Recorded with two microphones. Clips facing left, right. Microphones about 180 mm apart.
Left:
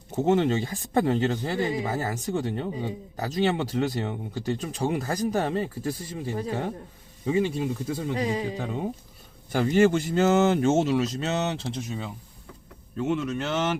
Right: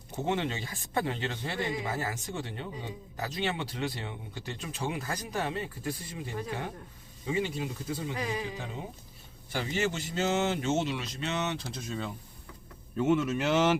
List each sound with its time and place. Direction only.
0.3 s speech: 45° left (ahead or behind)
8.6 s speech: 55° left (ahead or behind); by 11.7 s 35° left (ahead or behind)
11.9 s speech: 15° left (ahead or behind)
13.1 s speech: 5° right (ahead or behind)